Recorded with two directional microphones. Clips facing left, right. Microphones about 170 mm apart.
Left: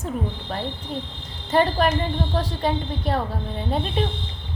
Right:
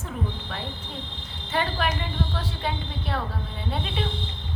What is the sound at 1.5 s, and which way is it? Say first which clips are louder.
A woman's voice: left 7 dB; 40° left (ahead or behind).